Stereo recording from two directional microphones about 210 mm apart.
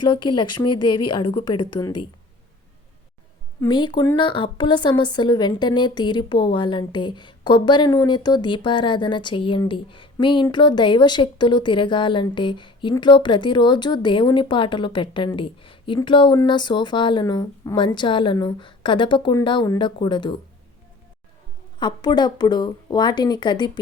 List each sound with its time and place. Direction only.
0.0 s speech: 20° left (ahead or behind)
3.6 s speech: 20° left (ahead or behind)
21.8 s speech: 20° left (ahead or behind)